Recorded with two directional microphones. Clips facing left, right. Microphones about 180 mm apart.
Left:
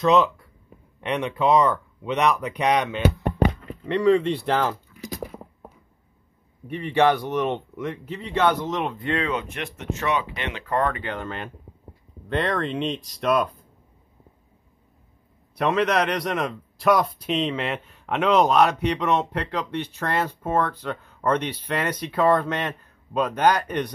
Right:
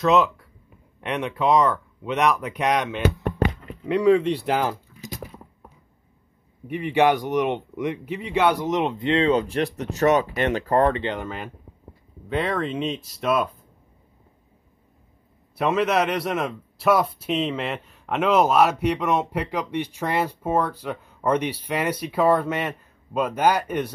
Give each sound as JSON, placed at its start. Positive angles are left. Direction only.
{"t": 0.0, "sound": "speech", "side_deg": 0}
{"t": 6.7, "sound": "a man's voice", "side_deg": -15}
{"t": 11.1, "sound": "speech", "side_deg": -5}
{"t": 15.5, "sound": "a man's voice", "side_deg": -5}